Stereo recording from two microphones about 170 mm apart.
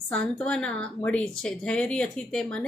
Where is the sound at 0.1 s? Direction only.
5° left (ahead or behind).